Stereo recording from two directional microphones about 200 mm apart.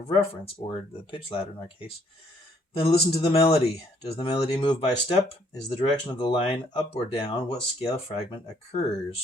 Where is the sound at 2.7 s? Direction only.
30° left (ahead or behind).